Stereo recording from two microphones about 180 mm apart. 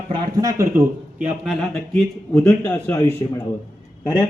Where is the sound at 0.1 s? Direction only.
20° right (ahead or behind).